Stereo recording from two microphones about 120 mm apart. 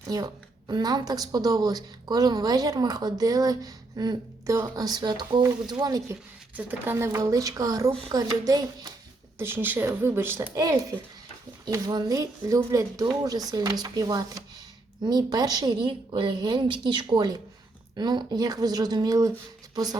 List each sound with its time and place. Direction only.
0.0 s a woman's voice: 30° right (ahead or behind)
6.6 s speech: 15° right (ahead or behind); by 8.9 s 30° right (ahead or behind)
9.4 s a woman's voice: 20° right (ahead or behind); by 20.0 s 35° right (ahead or behind)